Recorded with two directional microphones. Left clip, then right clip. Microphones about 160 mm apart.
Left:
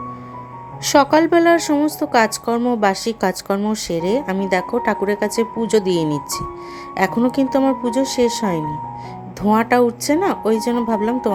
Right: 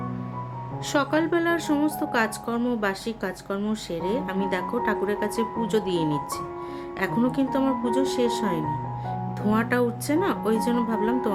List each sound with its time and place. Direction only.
0.9 s speech: 40° left (ahead or behind)